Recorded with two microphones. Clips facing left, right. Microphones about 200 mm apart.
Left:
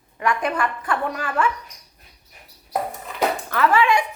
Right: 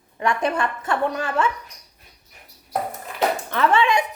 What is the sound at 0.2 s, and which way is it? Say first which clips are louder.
Speech: right 1 dB; 25° right (ahead or behind).